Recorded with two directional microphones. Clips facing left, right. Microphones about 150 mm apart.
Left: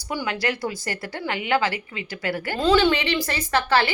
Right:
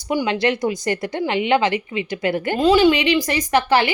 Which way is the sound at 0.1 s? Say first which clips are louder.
Right 7 dB; 20° right (ahead or behind).